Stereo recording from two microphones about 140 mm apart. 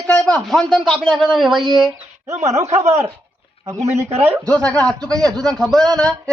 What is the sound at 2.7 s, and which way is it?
Speech, 55° right (ahead or behind).